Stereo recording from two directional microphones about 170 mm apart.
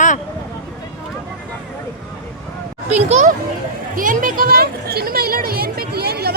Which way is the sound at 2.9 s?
45° right (ahead or behind).